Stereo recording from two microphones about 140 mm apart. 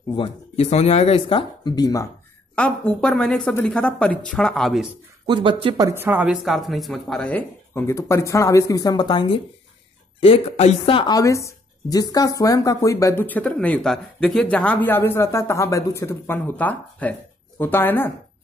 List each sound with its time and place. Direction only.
0.1 s speech: 45° left (ahead or behind)
1.8 s speech: 25° left (ahead or behind)
2.5 s a woman's voice: 10° left (ahead or behind)
5.2 s speech: 35° right (ahead or behind)
5.8 s a woman's voice: 20° right (ahead or behind)
6.4 s speech: centre (ahead or behind); by 9.4 s 30° left (ahead or behind)
10.2 s speech: 45° left (ahead or behind)
11.1 s speech: 20° left (ahead or behind)